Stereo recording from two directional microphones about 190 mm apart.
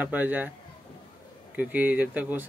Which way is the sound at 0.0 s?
10° right (ahead or behind).